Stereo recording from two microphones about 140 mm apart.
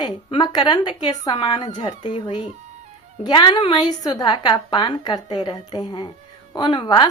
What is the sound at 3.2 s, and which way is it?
A woman's voice, 35° left (ahead or behind).